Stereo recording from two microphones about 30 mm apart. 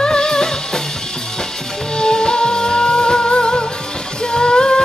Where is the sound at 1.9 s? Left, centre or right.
Left.